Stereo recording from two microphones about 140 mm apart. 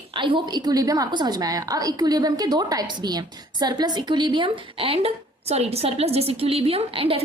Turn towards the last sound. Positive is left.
turn(degrees=-40)  # may be behind; listen again after turning